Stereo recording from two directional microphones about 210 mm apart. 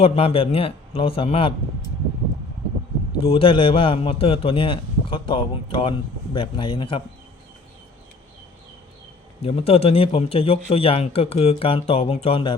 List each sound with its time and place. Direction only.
0.0 s a man's voice: 30° left (ahead or behind)
3.2 s a man's voice: 25° left (ahead or behind)
9.4 s a man's voice: 25° left (ahead or behind)